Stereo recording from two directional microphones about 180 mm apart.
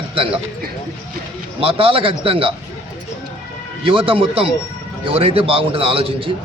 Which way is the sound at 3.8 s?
30° right (ahead or behind).